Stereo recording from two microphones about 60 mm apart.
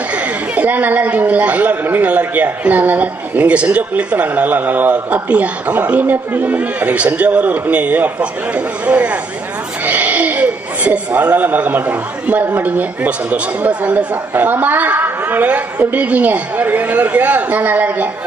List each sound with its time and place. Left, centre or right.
0.1 s a woman's voice: right